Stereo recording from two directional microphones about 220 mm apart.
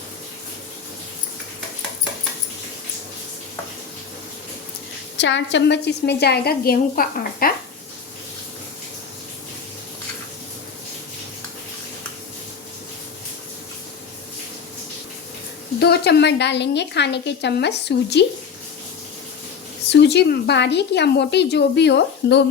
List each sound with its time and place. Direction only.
5.1 s a woman's voice: 55° left (ahead or behind)
15.8 s a woman's voice: 50° left (ahead or behind)
19.9 s a woman's voice: 50° left (ahead or behind)